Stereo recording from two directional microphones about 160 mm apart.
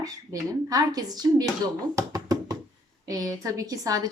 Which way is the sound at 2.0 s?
20° right (ahead or behind).